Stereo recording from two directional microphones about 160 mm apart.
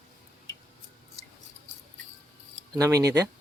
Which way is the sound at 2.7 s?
20° right (ahead or behind).